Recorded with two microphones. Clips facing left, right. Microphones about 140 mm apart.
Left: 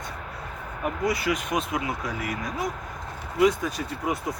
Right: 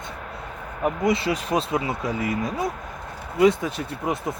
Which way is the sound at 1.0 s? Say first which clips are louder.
Right 2 dB; 25° right (ahead or behind).